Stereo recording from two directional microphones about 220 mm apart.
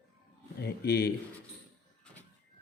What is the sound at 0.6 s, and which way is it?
Speech, 45° left (ahead or behind).